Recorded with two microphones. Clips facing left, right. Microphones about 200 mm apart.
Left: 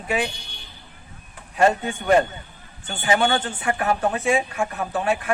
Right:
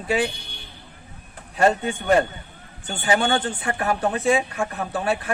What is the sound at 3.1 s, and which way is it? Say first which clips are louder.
Speech: even; 35° right (ahead or behind).